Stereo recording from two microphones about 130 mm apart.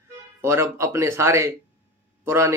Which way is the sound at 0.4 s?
20° right (ahead or behind).